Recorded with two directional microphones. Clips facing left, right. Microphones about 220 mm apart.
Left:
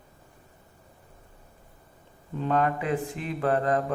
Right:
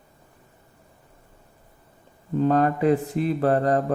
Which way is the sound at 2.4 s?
40° right (ahead or behind).